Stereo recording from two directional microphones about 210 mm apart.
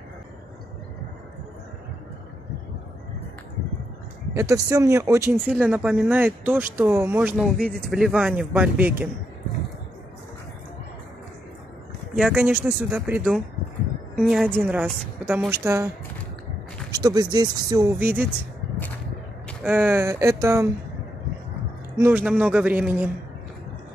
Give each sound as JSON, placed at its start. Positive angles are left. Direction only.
{"t": 4.3, "sound": "speech", "side_deg": -15}
{"t": 12.2, "sound": "speech", "side_deg": -5}
{"t": 16.9, "sound": "speech", "side_deg": -15}
{"t": 19.4, "sound": "speech", "side_deg": -5}
{"t": 21.9, "sound": "speech", "side_deg": -10}